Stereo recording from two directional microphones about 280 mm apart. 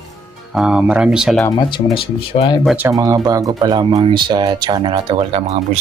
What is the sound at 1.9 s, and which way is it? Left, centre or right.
Speech, centre.